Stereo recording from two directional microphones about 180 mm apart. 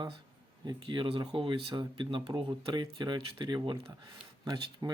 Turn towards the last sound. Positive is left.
turn(degrees=-25)  # may be behind; listen again after turning